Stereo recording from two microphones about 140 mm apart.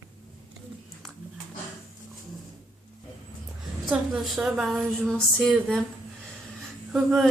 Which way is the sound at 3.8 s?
5° right (ahead or behind).